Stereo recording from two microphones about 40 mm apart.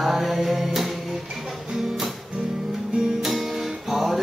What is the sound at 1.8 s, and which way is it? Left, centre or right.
Music, centre.